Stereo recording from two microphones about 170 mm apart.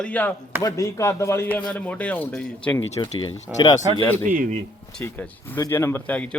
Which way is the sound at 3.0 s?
25° left (ahead or behind).